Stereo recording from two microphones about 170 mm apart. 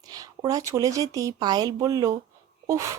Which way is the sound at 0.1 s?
20° right (ahead or behind).